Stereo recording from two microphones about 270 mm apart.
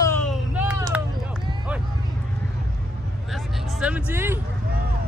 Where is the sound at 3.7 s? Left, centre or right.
Centre.